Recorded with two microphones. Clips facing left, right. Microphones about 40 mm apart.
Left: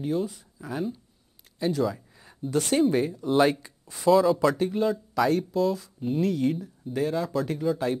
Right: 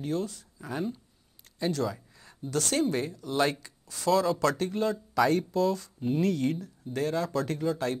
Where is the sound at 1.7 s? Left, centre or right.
Centre.